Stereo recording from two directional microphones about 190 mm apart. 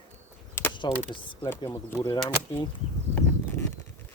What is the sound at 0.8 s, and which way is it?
Speech, 25° left (ahead or behind).